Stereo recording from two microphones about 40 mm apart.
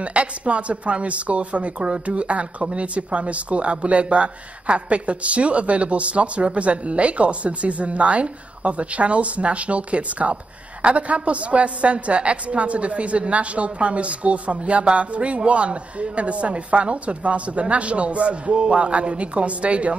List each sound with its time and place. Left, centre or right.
0.0 s speech: right